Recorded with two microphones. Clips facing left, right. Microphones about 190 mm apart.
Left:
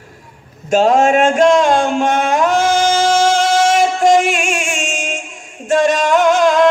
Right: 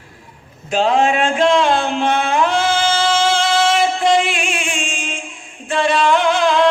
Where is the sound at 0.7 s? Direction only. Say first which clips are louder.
Left 4 dB; 45° left (ahead or behind).